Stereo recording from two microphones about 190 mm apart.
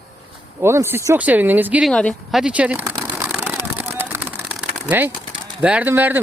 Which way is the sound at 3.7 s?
10° right (ahead or behind).